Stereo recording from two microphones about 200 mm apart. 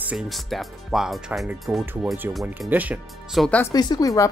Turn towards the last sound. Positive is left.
turn(degrees=15)  # may be behind; listen again after turning